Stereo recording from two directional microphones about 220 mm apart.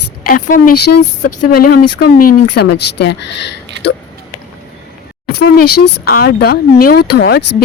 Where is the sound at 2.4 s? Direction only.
55° left (ahead or behind).